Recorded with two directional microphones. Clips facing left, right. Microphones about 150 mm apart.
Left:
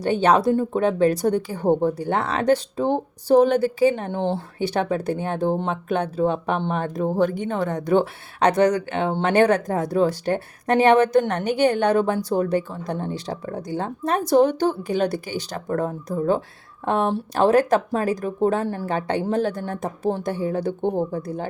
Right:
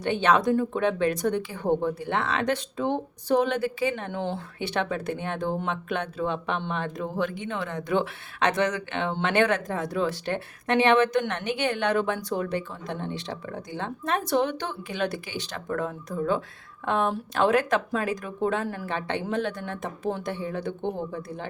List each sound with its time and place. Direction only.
0.0 s speech: 40° left (ahead or behind)